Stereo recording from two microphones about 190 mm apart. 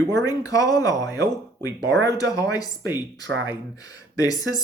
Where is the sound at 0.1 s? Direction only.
20° left (ahead or behind).